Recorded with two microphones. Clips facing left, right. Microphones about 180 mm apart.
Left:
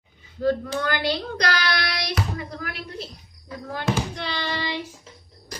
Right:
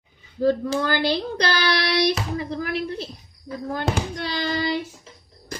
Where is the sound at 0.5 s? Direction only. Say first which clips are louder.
Right 2 dB; 30° right (ahead or behind).